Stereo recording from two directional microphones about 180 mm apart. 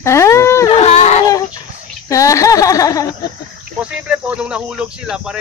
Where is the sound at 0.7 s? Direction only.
35° left (ahead or behind).